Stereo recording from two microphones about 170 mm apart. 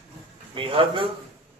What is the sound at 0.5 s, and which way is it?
Speech, 30° right (ahead or behind).